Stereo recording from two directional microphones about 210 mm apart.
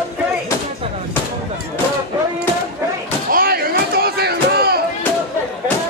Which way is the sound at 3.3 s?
45° right (ahead or behind).